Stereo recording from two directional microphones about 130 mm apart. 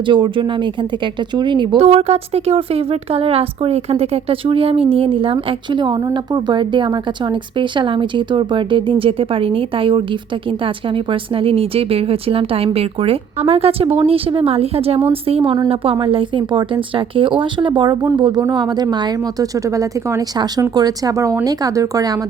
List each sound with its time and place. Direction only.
0.1 s speech: 40° right (ahead or behind)
1.8 s speech: 55° right (ahead or behind); by 22.2 s 30° right (ahead or behind)